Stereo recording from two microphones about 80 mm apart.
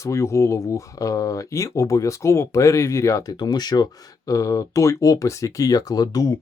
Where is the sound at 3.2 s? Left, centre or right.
Left.